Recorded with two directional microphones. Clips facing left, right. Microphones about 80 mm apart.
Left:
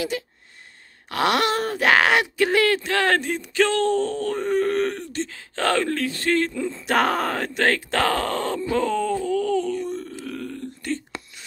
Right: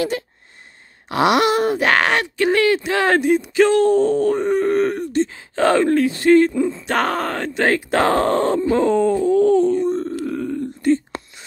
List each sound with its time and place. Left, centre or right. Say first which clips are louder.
0.1 s speech: right 3 dB; right
1.0 s speech: right 5 dB; centre
1.9 s speech: right 1 dB; centre
6.7 s speech: right 1 dB; centre
7.6 s speech: right 4 dB; centre; by 10.1 s right
10.2 s burping: right 8 dB; centre